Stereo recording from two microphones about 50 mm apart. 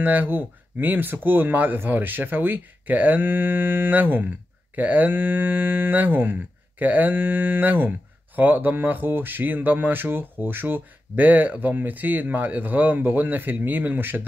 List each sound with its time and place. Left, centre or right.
0.0 s speech: right